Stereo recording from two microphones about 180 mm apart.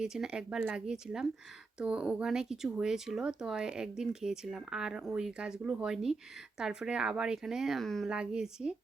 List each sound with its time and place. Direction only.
0.0 s speech: 5° right (ahead or behind)